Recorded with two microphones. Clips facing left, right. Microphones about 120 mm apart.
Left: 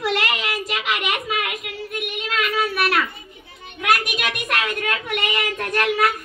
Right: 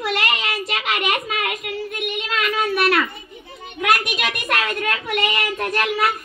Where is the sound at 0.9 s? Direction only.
35° right (ahead or behind).